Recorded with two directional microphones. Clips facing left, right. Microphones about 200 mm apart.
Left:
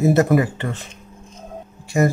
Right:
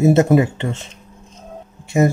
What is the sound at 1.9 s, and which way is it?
Speech, 20° right (ahead or behind).